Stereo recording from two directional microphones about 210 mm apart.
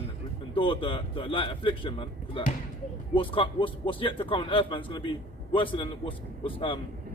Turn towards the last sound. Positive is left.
turn(degrees=25)  # may be behind; listen again after turning